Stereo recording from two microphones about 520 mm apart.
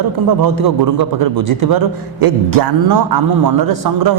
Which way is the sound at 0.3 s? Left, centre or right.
Right.